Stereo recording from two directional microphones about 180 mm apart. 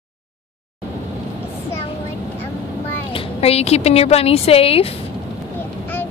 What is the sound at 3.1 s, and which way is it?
A woman's voice, 30° left (ahead or behind).